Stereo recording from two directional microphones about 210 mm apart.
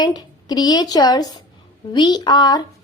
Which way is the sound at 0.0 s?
20° left (ahead or behind).